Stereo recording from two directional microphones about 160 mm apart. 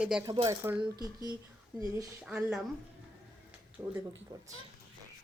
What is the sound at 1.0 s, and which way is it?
Speech, 25° right (ahead or behind).